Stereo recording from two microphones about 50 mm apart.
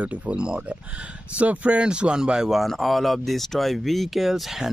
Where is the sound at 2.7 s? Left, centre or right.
Centre.